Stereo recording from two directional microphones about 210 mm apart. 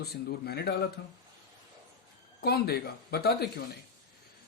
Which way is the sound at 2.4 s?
50° left (ahead or behind).